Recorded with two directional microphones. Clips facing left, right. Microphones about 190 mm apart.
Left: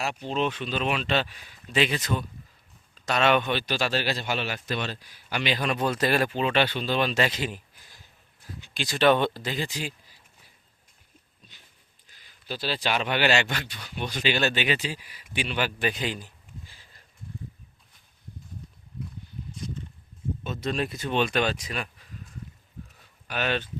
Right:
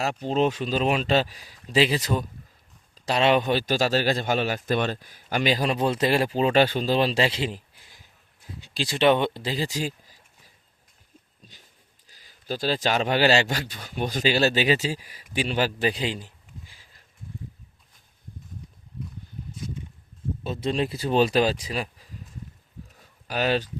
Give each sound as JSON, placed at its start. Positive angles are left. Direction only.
{"t": 0.0, "sound": "a man's voice", "side_deg": -40}
{"t": 12.0, "sound": "a man's voice", "side_deg": -40}
{"t": 19.5, "sound": "a sound", "side_deg": -5}
{"t": 20.4, "sound": "a man's voice", "side_deg": -30}
{"t": 23.3, "sound": "a man's voice", "side_deg": -35}